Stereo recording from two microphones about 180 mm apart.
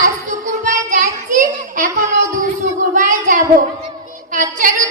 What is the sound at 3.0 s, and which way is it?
Child singing, 45° right (ahead or behind).